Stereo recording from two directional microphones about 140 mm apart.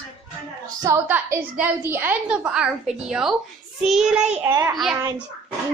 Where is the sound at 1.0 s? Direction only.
15° right (ahead or behind).